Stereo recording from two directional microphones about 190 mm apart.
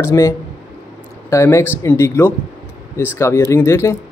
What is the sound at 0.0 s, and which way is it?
Speech, 15° left (ahead or behind).